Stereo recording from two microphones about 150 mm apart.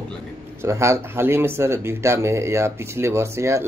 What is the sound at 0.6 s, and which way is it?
A man's voice, 20° right (ahead or behind).